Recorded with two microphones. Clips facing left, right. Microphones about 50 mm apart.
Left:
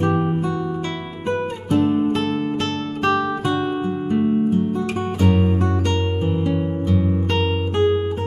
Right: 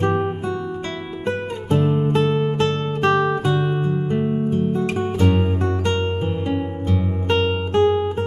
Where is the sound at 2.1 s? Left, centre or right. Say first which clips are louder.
Right 3 dB; right.